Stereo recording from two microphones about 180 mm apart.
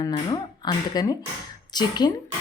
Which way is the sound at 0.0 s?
20° left (ahead or behind).